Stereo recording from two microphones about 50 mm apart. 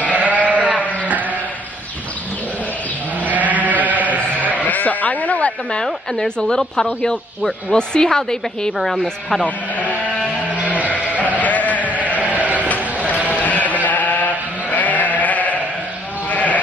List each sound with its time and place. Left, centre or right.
0.1 s sheep: right
3.3 s sheep: right
4.6 s sheep: left
6.1 s speech: centre
9.4 s sheep: left
10.6 s sheep: right
11.3 s sheep: left
12.3 s sheep: right
12.6 s sheep: left